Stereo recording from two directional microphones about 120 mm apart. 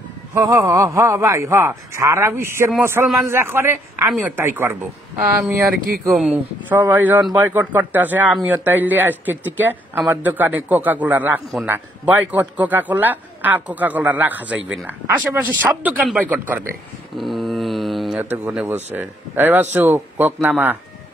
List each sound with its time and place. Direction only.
0.3 s a man's voice: 25° right (ahead or behind)
6.1 s speech: 10° right (ahead or behind)
17.2 s mantra: centre (ahead or behind)
18.2 s speech: 15° right (ahead or behind)